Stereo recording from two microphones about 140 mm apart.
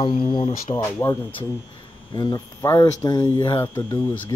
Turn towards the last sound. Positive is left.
turn(degrees=25)  # may be behind; listen again after turning